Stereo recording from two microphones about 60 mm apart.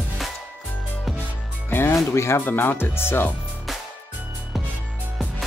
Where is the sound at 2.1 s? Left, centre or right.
Left.